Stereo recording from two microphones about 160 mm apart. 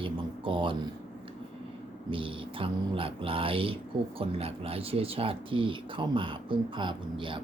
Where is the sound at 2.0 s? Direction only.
35° right (ahead or behind).